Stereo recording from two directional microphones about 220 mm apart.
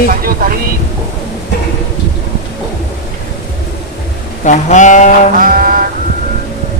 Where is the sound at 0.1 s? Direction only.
40° right (ahead or behind).